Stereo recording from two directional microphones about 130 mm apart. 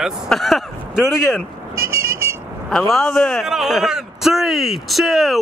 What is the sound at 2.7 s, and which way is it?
A man's voice, 5° left (ahead or behind).